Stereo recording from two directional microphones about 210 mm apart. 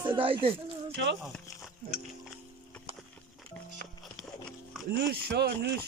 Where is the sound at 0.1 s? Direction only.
25° right (ahead or behind).